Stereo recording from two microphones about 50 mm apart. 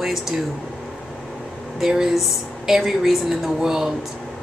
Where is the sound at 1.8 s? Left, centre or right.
Centre.